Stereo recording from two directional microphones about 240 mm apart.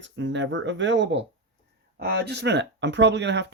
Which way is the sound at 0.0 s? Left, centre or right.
Right.